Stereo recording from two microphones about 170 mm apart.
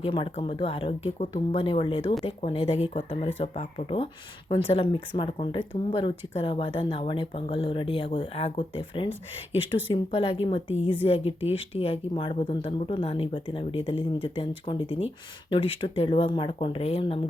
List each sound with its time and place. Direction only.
0.0 s speech: 35° left (ahead or behind)